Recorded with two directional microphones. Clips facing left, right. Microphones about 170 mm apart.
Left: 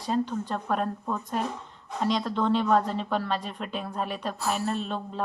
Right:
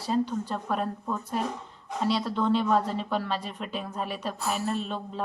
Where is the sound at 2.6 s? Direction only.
10° right (ahead or behind).